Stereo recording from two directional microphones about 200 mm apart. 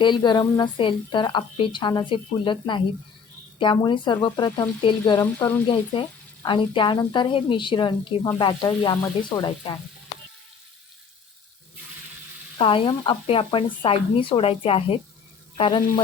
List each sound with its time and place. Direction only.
0.0 s a woman's voice: 20° left (ahead or behind)
12.5 s a woman's voice: 25° left (ahead or behind)